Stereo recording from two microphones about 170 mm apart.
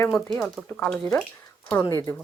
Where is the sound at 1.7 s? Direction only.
20° left (ahead or behind).